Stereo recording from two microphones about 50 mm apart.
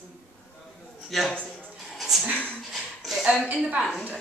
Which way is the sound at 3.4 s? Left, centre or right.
Right.